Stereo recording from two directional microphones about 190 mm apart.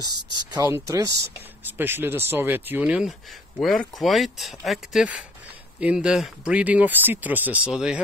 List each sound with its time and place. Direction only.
0.0 s speech: 25° right (ahead or behind); by 8.0 s 5° right (ahead or behind)